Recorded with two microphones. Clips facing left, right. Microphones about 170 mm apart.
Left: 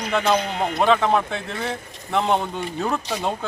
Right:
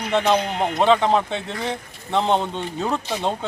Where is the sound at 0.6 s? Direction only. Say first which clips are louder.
Right 2 dB; 30° right (ahead or behind).